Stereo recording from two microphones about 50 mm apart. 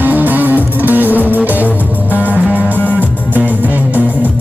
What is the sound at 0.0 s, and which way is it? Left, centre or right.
Music, right.